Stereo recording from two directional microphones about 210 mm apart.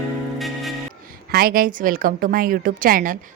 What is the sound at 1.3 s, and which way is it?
A woman's voice, 45° right (ahead or behind).